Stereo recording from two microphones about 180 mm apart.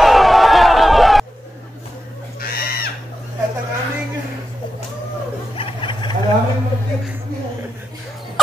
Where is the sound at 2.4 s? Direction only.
60° left (ahead or behind).